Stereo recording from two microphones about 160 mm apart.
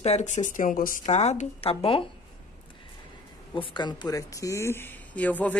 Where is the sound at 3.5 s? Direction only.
30° left (ahead or behind).